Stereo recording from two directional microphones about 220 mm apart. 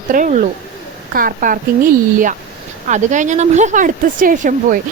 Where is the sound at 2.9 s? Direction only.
35° right (ahead or behind).